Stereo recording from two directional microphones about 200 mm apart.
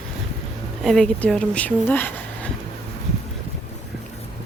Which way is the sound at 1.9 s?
10° left (ahead or behind).